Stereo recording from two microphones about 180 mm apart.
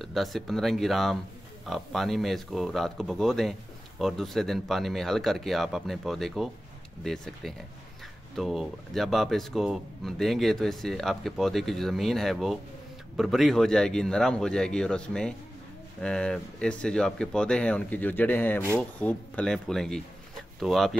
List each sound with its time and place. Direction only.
0.0 s a man's voice: centre (ahead or behind)